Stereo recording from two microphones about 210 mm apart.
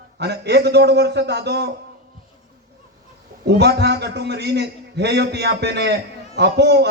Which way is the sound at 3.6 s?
50° right (ahead or behind).